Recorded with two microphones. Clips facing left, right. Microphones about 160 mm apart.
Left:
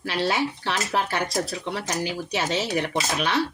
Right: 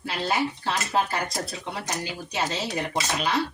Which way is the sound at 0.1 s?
85° left.